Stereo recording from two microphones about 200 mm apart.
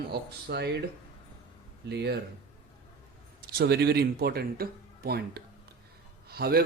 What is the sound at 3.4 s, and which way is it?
Speech, 55° right (ahead or behind).